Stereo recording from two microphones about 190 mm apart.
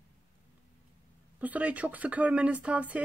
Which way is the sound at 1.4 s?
10° right (ahead or behind).